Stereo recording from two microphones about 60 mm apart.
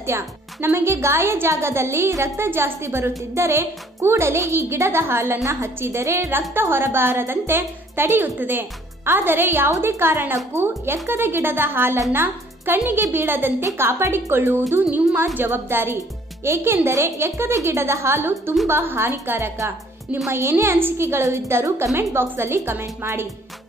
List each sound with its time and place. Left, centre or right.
0.0 s a woman's voice: right